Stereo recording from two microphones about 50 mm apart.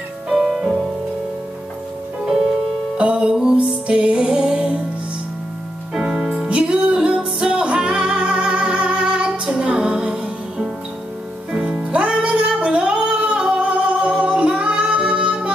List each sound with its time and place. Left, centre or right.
0.3 s music: centre
3.0 s music: right
6.0 s music: right
12.1 s singing: centre
14.5 s female singing: centre